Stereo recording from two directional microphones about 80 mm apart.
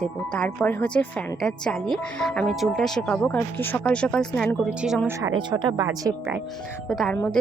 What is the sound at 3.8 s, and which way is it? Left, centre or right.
Speech, centre.